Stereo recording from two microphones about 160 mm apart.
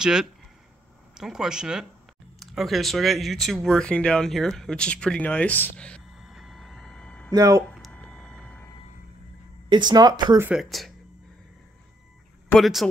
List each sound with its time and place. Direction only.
0.0 s speech: 5° right (ahead or behind)
7.3 s speech: 20° right (ahead or behind)
7.7 s a sound: 5° left (ahead or behind)
9.7 s speech: 30° right (ahead or behind)
10.4 s speech: 5° right (ahead or behind)
12.4 s speech: centre (ahead or behind)